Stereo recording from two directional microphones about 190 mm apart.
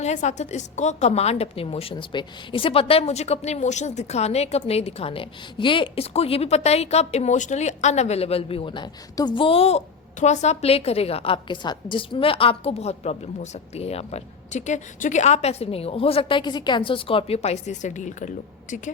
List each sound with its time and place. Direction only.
0.0 s a woman's voice: 40° left (ahead or behind)